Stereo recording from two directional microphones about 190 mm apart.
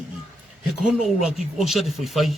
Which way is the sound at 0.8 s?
5° right (ahead or behind).